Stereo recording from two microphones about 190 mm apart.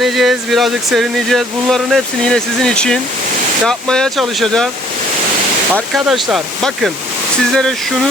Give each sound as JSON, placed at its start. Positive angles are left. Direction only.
{"t": 0.0, "sound": "speech", "side_deg": 0}
{"t": 5.7, "sound": "speech", "side_deg": 0}